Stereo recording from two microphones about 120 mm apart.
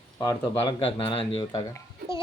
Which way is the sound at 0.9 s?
50° left (ahead or behind).